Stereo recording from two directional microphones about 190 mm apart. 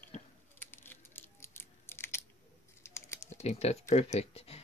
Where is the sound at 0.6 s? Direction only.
10° left (ahead or behind).